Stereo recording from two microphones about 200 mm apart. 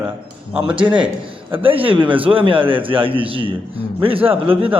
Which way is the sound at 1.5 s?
25° right (ahead or behind).